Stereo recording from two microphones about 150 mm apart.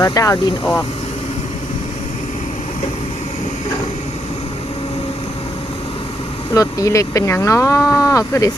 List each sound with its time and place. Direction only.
0.0 s speech: 25° left (ahead or behind)
6.5 s speech: 20° left (ahead or behind)